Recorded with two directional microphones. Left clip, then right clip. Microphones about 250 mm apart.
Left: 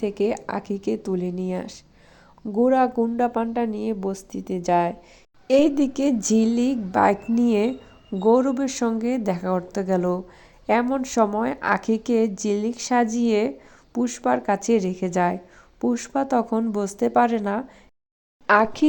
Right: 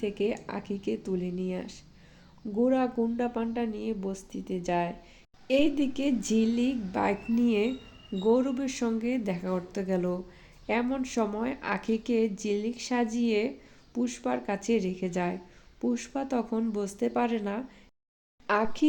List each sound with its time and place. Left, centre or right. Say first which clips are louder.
0.0 s a woman's voice: left 7 dB; left